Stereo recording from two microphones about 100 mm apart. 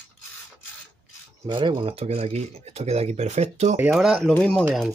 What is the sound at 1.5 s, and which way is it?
Speech, 50° right (ahead or behind).